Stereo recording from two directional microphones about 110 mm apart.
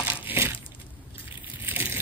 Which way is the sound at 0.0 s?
50° left (ahead or behind).